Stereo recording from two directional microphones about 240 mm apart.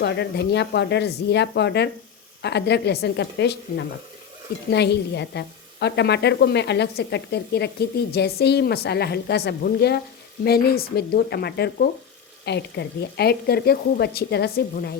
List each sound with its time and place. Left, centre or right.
0.0 s a woman's voice: left